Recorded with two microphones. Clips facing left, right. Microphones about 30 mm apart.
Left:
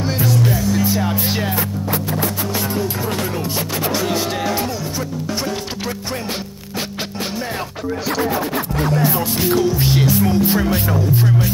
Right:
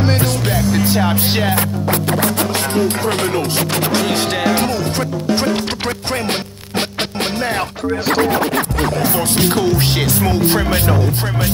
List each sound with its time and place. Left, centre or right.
0.2 s music: right
1.5 s speech: right
5.3 s speech: right
8.1 s music: right